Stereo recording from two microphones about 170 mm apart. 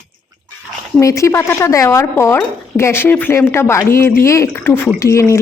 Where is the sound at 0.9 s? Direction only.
20° left (ahead or behind).